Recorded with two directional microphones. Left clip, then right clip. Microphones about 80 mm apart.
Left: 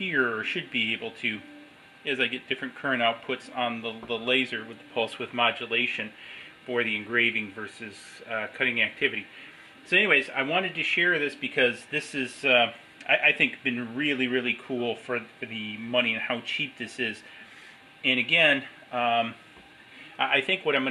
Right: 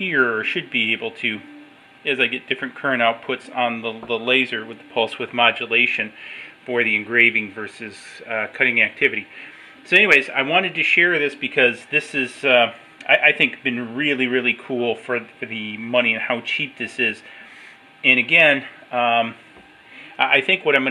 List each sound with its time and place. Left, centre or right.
0.0 s speech: right
18.2 s speech: right